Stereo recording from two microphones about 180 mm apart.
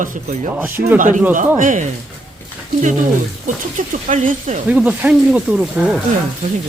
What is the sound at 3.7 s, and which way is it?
Speech, 45° right (ahead or behind).